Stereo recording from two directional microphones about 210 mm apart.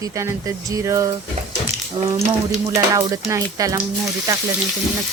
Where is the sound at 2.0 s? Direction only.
30° right (ahead or behind).